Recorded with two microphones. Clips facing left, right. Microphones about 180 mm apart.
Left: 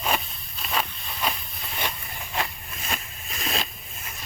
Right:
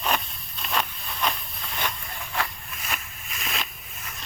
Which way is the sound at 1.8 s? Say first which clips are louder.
Even; 20° left (ahead or behind).